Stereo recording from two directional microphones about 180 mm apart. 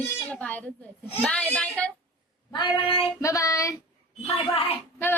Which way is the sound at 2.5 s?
30° left (ahead or behind).